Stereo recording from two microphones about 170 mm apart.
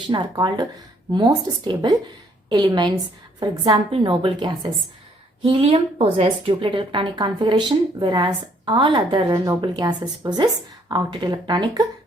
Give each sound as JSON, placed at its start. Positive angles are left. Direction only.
{"t": 0.1, "sound": "speech", "side_deg": -25}